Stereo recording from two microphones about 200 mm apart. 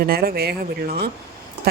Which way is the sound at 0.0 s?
50° right (ahead or behind).